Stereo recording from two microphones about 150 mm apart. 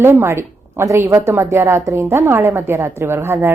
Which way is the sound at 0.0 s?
15° right (ahead or behind).